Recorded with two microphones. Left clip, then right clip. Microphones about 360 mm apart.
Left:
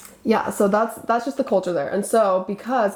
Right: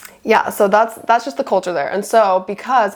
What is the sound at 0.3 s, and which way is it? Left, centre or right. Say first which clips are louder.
A woman's voice: right 6 dB; right.